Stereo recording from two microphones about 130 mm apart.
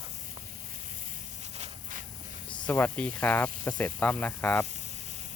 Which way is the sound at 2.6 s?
15° left (ahead or behind).